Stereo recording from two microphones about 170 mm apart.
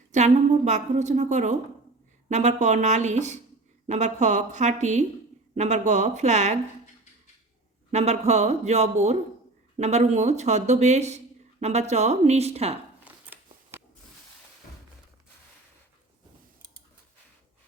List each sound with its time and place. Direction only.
0.1 s a woman's voice: 45° right (ahead or behind)
7.9 s speech: 40° right (ahead or behind)
13.3 s a sound: 10° right (ahead or behind)